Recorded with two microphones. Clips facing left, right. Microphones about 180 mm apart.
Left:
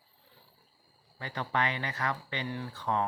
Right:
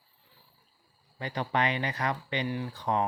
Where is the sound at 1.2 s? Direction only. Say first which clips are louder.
Right 3 dB; 20° right (ahead or behind).